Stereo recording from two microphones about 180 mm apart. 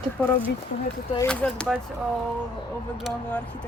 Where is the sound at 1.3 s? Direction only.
5° left (ahead or behind).